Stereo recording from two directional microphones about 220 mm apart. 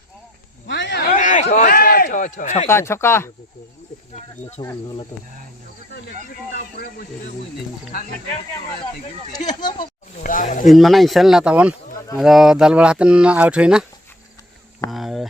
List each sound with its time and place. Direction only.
0.7 s a sound: 50° left (ahead or behind); by 2.6 s 30° left (ahead or behind)
2.6 s speech: 10° left (ahead or behind)
4.6 s speech: 15° left (ahead or behind)
6.5 s speech: 45° left (ahead or behind)
9.5 s speech: 20° left (ahead or behind)
10.2 s speech: 35° left (ahead or behind)
10.7 s speech: centre (ahead or behind)
14.8 s a sound: centre (ahead or behind)